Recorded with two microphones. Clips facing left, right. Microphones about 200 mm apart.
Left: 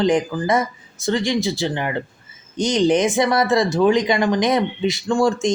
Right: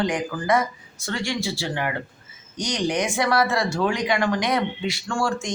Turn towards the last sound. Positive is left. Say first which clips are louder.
# left 8 dB
turn(degrees=20)  # may be behind; listen again after turning